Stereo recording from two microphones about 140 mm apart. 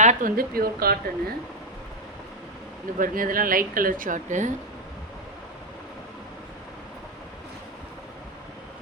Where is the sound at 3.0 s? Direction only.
80° right; by 4.5 s 60° right (ahead or behind).